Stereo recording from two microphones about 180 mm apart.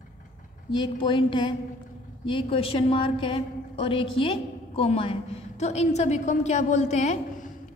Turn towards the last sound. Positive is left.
turn(degrees=40)  # may be behind; listen again after turning